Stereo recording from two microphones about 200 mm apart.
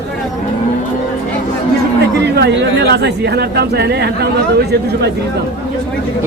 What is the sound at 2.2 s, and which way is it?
Speech, 55° right (ahead or behind).